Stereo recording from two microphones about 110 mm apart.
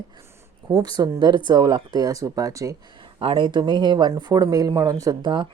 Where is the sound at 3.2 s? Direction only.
45° right (ahead or behind).